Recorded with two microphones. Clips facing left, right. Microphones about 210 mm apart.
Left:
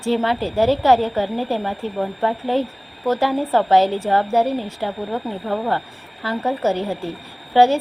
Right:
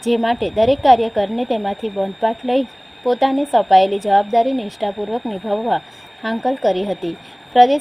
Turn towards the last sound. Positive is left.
turn(degrees=-20)  # may be behind; listen again after turning